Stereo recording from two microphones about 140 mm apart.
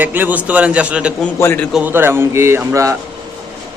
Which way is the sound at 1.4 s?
15° left (ahead or behind).